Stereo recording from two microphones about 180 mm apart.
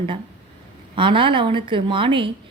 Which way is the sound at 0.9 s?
30° right (ahead or behind).